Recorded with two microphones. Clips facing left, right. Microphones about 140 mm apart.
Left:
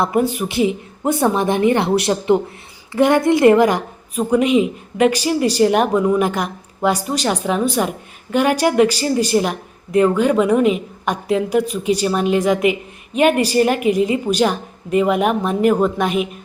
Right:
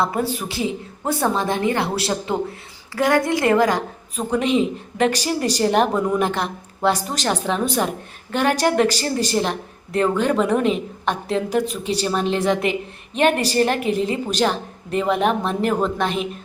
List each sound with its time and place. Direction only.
0.0 s a woman's voice: 20° left (ahead or behind)